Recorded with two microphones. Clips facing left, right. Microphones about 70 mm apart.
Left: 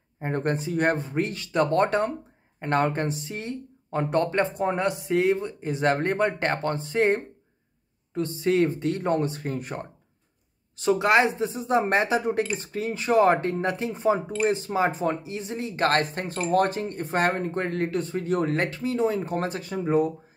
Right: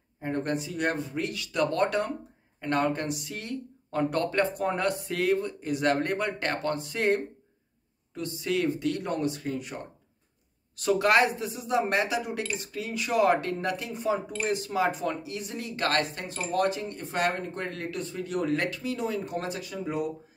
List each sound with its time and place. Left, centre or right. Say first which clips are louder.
0.2 s speech: left 3 dB; left
10.8 s speech: left 2 dB; left